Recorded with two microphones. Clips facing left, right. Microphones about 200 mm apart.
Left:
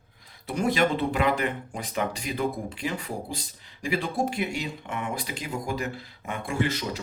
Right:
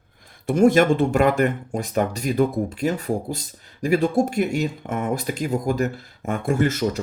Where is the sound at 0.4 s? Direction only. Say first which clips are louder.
Right 9 dB; 50° right (ahead or behind).